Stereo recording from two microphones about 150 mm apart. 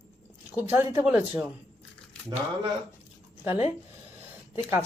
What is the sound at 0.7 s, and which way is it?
Speech, 15° right (ahead or behind).